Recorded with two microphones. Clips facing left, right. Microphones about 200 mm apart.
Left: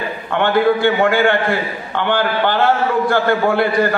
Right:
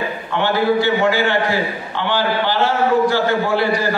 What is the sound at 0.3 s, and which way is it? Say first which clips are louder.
A man's voice: left 3 dB; 55° left (ahead or behind).